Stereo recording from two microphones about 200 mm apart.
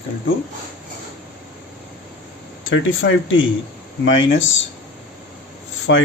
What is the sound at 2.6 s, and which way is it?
Speech, 75° left (ahead or behind).